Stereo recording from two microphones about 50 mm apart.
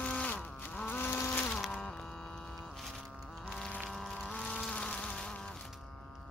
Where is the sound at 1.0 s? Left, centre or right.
Left.